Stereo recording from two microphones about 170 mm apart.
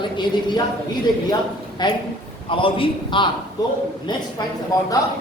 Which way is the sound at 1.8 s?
25° left (ahead or behind).